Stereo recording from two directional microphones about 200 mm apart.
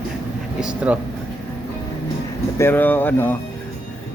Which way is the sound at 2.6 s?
10° left (ahead or behind).